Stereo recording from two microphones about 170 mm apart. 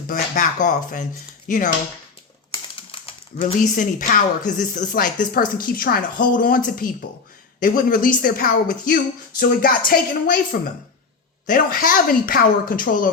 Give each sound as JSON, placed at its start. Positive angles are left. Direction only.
{"t": 0.1, "sound": "speech", "side_deg": 50}
{"t": 3.4, "sound": "speech", "side_deg": 50}